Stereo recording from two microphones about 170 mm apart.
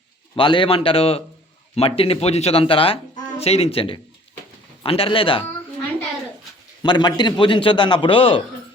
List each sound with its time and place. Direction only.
0.3 s speech: 30° left (ahead or behind)
6.8 s a man's voice: 25° left (ahead or behind)